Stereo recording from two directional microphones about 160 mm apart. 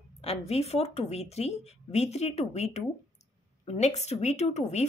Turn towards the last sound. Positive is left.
turn(degrees=45)  # may be behind; listen again after turning